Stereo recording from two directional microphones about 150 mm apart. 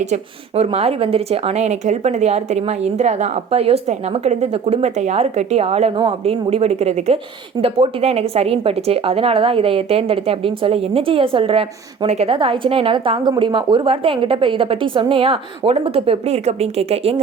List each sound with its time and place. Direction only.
0.0 s a woman's voice: 45° right (ahead or behind)